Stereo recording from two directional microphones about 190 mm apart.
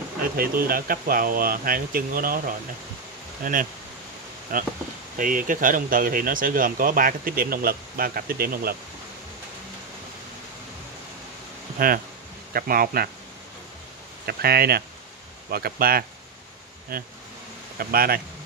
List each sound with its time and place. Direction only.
0.2 s speech: 50° right (ahead or behind)
11.8 s speech: 45° right (ahead or behind)
14.2 s speech: 55° right (ahead or behind)